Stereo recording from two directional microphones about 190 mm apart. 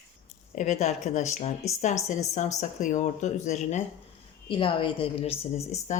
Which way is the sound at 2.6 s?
40° left (ahead or behind).